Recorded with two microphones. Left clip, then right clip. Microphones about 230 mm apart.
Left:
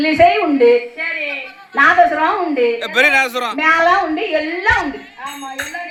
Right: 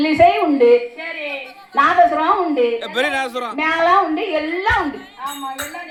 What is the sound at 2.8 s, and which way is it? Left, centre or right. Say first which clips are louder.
Speech: left 7 dB; centre.